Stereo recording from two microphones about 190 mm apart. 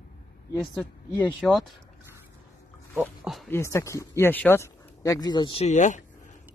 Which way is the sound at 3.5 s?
15° left (ahead or behind).